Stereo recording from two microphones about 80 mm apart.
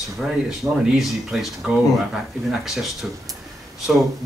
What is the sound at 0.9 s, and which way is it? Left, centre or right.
Speech, centre.